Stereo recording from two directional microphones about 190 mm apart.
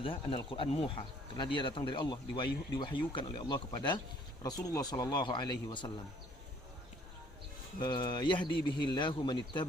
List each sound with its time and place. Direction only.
0.0 s speech: 30° left (ahead or behind)
7.8 s speech: 25° left (ahead or behind)